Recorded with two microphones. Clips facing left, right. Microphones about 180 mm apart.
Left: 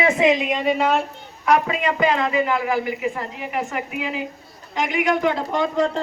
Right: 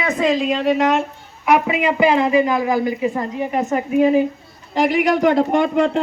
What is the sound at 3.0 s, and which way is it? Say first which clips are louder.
Speech: right 6 dB; 30° right (ahead or behind).